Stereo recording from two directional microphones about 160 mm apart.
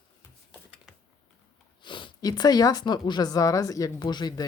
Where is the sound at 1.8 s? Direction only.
30° left (ahead or behind).